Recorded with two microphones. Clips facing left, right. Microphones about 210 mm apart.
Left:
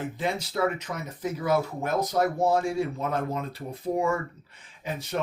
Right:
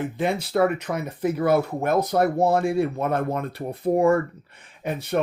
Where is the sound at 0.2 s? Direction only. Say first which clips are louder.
Right 6 dB; 60° right (ahead or behind).